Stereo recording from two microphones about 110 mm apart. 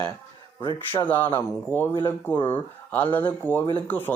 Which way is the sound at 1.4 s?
20° left (ahead or behind).